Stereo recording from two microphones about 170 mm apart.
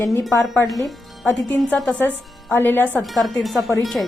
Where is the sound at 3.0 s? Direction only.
Centre (ahead or behind).